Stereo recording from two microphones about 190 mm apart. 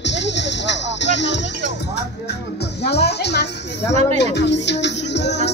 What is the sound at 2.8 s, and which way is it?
Music, 60° left (ahead or behind).